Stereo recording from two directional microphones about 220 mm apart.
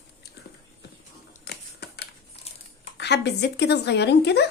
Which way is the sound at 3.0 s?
50° left (ahead or behind).